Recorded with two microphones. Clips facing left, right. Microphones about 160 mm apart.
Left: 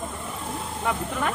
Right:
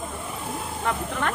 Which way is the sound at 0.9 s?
5° left (ahead or behind).